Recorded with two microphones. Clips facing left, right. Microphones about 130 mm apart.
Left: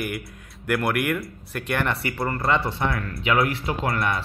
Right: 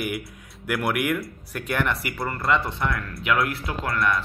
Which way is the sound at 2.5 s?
30° left (ahead or behind).